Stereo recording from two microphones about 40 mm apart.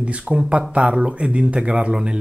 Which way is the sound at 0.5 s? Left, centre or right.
Right.